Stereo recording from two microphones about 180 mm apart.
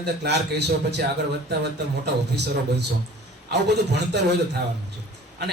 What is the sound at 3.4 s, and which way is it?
Speech, 70° right (ahead or behind).